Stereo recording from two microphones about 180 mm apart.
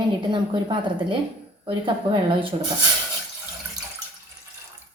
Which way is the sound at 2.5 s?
25° right (ahead or behind).